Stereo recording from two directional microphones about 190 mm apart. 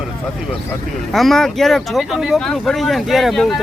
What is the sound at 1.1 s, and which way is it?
Speech, centre (ahead or behind).